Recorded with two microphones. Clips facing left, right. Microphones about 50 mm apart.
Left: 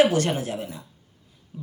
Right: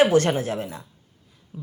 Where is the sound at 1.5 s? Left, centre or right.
Centre.